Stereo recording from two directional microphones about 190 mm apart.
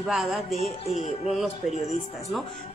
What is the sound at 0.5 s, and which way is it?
Music, 35° left (ahead or behind).